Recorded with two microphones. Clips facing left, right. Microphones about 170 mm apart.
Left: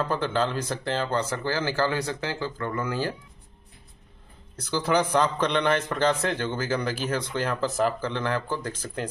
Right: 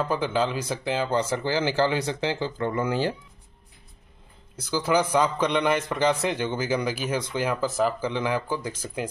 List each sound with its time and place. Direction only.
0.0 s speech: 10° right (ahead or behind)
4.6 s a man's voice: 5° right (ahead or behind)